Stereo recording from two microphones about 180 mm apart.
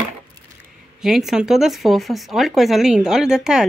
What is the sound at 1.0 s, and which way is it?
A woman's voice, centre (ahead or behind).